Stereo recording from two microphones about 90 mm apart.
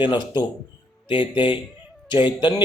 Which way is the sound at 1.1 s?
65° left (ahead or behind).